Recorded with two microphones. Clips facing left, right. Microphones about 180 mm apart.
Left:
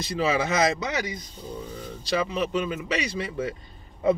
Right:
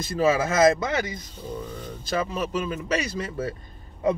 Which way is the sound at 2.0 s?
45° right (ahead or behind).